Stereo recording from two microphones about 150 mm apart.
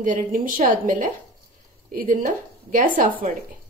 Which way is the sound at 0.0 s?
65° right (ahead or behind).